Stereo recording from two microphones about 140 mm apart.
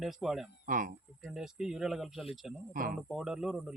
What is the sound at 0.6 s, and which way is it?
Speech, 75° right (ahead or behind).